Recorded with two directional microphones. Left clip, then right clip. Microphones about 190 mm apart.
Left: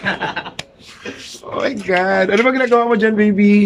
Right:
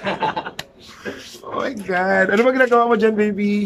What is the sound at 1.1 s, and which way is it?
A man's voice, 5° left (ahead or behind).